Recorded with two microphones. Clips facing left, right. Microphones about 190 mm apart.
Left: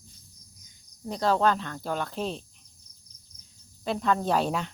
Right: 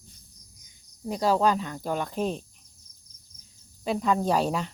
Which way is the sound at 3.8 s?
5° right (ahead or behind).